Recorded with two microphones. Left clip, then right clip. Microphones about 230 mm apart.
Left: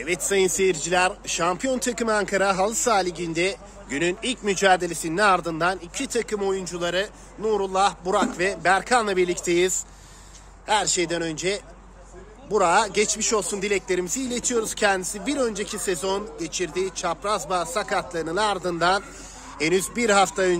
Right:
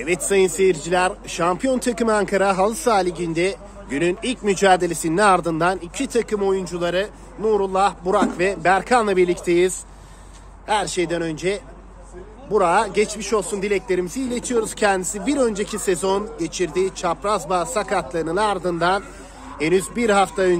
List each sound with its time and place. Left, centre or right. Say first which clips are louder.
0.0 s speech: right 4 dB; centre